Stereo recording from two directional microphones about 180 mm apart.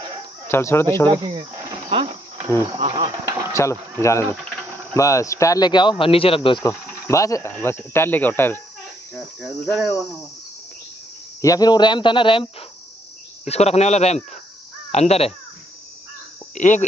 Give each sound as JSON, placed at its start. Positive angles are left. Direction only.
{"t": 0.5, "sound": "speech", "side_deg": 15}
{"t": 1.0, "sound": "speech", "side_deg": -25}
{"t": 1.9, "sound": "cricket", "side_deg": -35}
{"t": 2.8, "sound": "insect", "side_deg": -30}
{"t": 3.5, "sound": "speech", "side_deg": 15}
{"t": 7.1, "sound": "speech", "side_deg": 20}
{"t": 9.1, "sound": "cricket", "side_deg": 0}
{"t": 11.4, "sound": "speech", "side_deg": 20}
{"t": 13.5, "sound": "speech", "side_deg": 35}
{"t": 16.5, "sound": "speech", "side_deg": 45}